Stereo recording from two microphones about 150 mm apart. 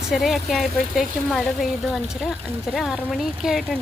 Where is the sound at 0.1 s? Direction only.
Centre (ahead or behind).